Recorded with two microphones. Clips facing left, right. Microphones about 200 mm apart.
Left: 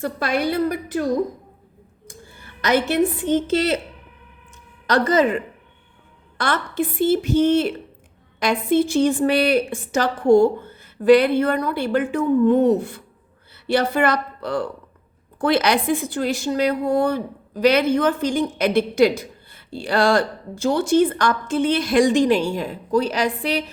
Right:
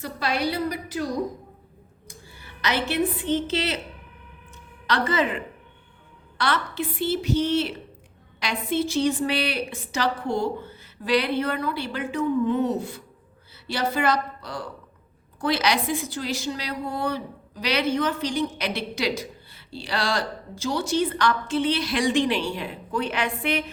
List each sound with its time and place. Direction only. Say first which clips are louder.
0.0 s a woman's voice: left 4 dB; 50° left (ahead or behind)
2.0 s a woman's voice: left 4 dB; 50° left (ahead or behind)
4.9 s a woman's voice: left 7 dB; 45° left (ahead or behind)